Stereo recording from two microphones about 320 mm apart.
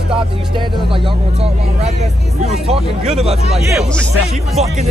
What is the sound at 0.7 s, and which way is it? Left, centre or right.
Speech, centre.